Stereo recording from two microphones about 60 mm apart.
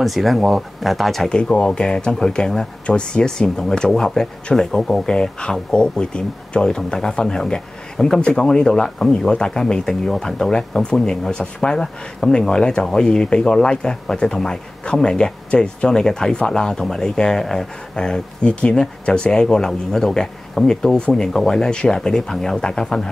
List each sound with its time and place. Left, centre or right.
0.0 s speech: centre
1.3 s speech: centre